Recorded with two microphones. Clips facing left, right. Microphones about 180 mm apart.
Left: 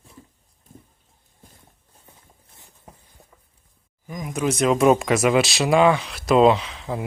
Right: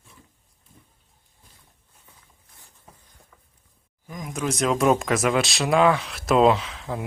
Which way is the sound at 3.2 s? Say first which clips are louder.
Left 4 dB; 20° left (ahead or behind).